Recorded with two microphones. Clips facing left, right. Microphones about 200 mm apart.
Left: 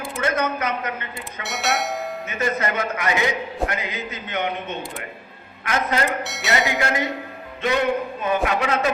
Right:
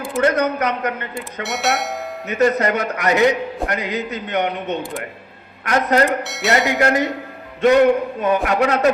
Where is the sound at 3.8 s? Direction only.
70° right (ahead or behind).